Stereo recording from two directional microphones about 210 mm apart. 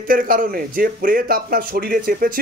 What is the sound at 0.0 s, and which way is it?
A man's voice, 40° right (ahead or behind).